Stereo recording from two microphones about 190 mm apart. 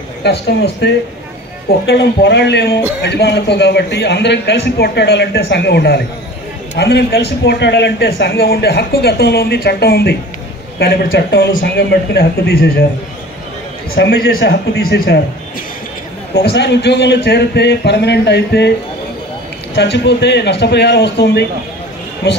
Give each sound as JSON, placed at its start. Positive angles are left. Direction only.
{"t": 0.2, "sound": "speech", "side_deg": 60}
{"t": 13.9, "sound": "speech", "side_deg": 55}
{"t": 16.3, "sound": "speech", "side_deg": 60}
{"t": 19.7, "sound": "speech", "side_deg": 65}